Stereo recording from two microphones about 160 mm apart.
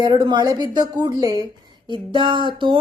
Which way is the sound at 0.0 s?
30° right (ahead or behind).